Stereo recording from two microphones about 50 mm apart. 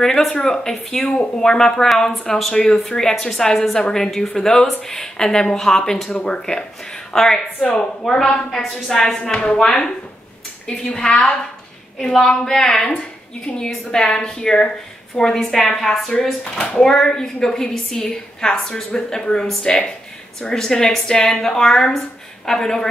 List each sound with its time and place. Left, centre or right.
0.0 s a woman's voice: centre
16.5 s speech: left
16.8 s a woman's voice: centre